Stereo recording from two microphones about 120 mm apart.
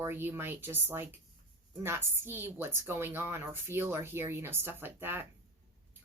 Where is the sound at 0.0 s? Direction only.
20° right (ahead or behind).